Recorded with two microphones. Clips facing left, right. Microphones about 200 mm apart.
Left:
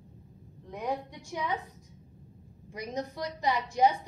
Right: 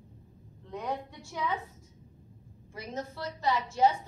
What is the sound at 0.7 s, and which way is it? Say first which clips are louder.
Speech: left 2 dB; 15° left (ahead or behind).